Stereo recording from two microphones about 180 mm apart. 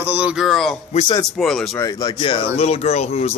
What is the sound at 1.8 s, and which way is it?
Speech, 20° left (ahead or behind).